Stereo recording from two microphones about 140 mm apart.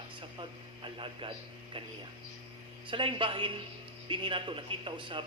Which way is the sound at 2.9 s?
40° right (ahead or behind).